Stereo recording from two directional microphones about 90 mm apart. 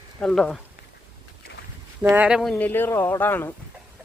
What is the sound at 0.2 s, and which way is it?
Speech, 10° left (ahead or behind).